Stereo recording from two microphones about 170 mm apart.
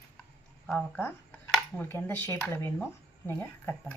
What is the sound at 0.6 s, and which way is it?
Speech, 10° left (ahead or behind).